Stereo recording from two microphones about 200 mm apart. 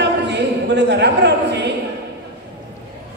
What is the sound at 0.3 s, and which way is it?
A woman's voice, 60° right (ahead or behind).